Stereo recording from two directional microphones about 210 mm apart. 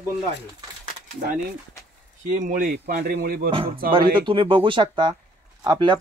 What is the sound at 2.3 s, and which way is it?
Speech, 40° right (ahead or behind).